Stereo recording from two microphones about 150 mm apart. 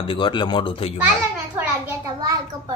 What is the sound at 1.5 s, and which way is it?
Speech, 15° right (ahead or behind).